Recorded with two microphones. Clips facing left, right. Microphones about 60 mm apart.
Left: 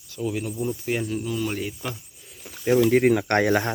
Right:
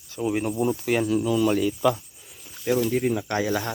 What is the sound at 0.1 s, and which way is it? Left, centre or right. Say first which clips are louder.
Speech: right 3 dB; right.